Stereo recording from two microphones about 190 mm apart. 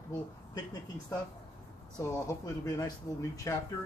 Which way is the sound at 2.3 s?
20° left (ahead or behind).